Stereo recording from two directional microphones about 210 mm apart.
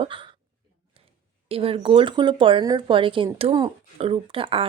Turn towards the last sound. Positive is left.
turn(degrees=-25)  # may be behind; listen again after turning